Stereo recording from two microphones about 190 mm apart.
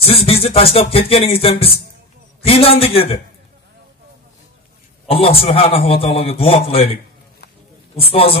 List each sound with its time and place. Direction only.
0.0 s music: 30° left (ahead or behind)
2.4 s a man's voice: 30° left (ahead or behind)
5.0 s a man's voice: 30° left (ahead or behind)
6.7 s music: 30° left (ahead or behind)
7.9 s a man's voice: 30° left (ahead or behind)